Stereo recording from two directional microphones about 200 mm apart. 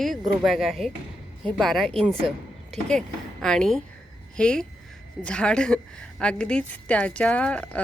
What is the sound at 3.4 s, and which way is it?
A woman's voice, 5° left (ahead or behind).